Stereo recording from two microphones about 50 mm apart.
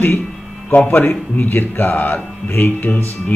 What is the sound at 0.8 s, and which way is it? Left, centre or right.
Speech, left.